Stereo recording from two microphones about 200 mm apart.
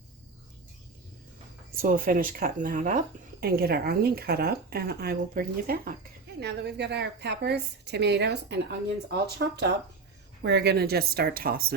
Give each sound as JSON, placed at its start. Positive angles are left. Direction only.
{"t": 1.8, "sound": "speech", "side_deg": -45}